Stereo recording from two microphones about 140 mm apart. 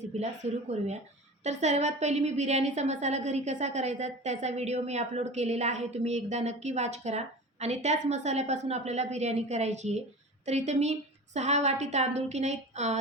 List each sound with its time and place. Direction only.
0.0 s a woman's voice: 50° right (ahead or behind)